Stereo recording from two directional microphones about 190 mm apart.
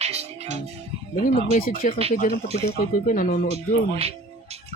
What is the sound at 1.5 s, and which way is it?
Speech, 45° left (ahead or behind).